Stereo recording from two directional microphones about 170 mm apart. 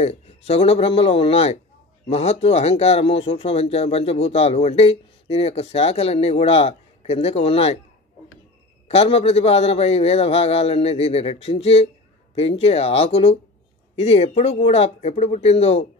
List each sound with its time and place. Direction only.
0.0 s a man's voice: 35° left (ahead or behind)
8.8 s a man's voice: 35° left (ahead or behind)